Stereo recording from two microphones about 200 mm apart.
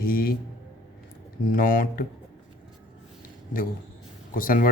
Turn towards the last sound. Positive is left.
turn(degrees=45)  # may be behind; listen again after turning